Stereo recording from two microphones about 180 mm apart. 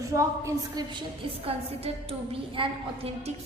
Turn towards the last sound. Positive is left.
turn(degrees=-30)  # may be behind; listen again after turning